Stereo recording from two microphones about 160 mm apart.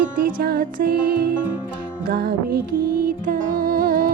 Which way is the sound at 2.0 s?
75° right (ahead or behind).